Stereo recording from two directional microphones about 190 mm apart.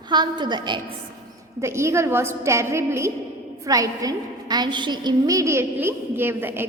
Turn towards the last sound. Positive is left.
turn(degrees=-10)  # may be behind; listen again after turning